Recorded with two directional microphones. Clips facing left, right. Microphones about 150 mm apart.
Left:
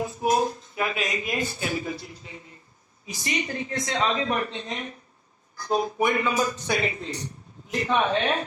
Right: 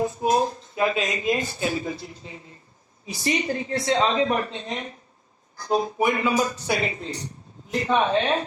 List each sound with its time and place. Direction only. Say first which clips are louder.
0.8 s a man's voice: right 4 dB; 25° right (ahead or behind)